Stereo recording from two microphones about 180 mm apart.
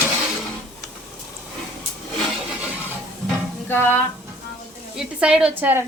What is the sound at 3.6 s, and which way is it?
Stir, 10° left (ahead or behind).